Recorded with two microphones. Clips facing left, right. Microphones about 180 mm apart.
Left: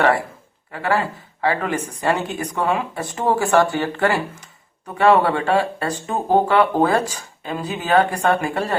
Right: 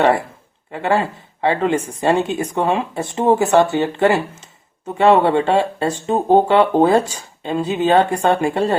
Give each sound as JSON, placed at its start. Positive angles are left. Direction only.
{"t": 0.7, "sound": "speech", "side_deg": -25}